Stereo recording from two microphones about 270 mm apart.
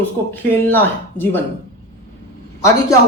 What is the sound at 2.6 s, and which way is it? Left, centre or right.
Speech, centre.